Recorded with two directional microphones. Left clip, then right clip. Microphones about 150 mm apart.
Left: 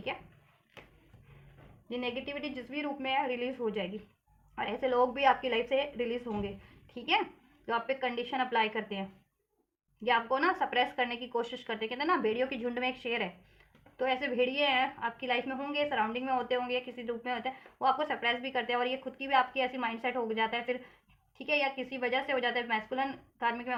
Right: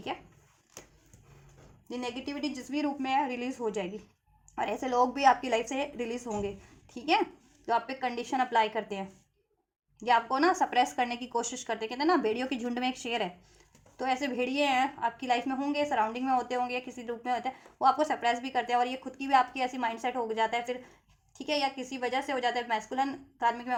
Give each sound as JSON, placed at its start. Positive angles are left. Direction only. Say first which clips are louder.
{"t": 1.9, "sound": "a woman's voice", "louder": "left 1 dB", "side_deg": -40}